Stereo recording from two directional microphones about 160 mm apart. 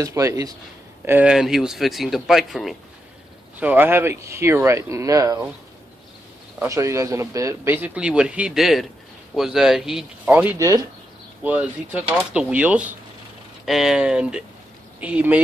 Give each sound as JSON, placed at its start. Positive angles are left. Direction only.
{"t": 0.0, "sound": "speech", "side_deg": -20}
{"t": 1.0, "sound": "speech", "side_deg": -10}
{"t": 6.6, "sound": "speech", "side_deg": -20}
{"t": 11.4, "sound": "speech", "side_deg": -10}